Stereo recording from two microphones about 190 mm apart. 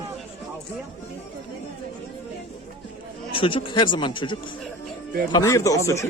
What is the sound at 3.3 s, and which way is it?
Speech, 30° left (ahead or behind).